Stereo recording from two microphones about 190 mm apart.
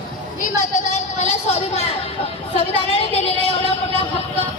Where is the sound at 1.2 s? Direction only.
35° left (ahead or behind).